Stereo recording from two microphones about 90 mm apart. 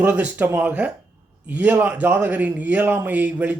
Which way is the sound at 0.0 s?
15° right (ahead or behind).